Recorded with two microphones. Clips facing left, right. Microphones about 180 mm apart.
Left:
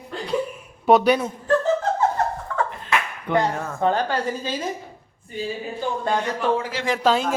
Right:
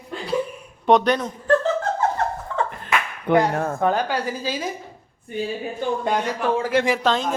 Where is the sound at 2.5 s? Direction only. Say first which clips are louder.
Right 1 dB; 20° right (ahead or behind).